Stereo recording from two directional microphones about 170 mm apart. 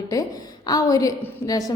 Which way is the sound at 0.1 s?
20° left (ahead or behind).